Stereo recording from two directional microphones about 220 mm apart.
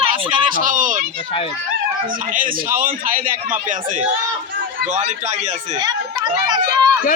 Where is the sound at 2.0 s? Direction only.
40° right (ahead or behind).